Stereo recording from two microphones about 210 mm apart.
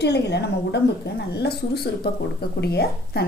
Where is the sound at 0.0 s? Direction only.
55° left (ahead or behind).